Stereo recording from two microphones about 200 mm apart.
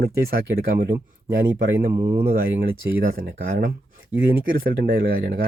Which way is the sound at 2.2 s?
45° right (ahead or behind).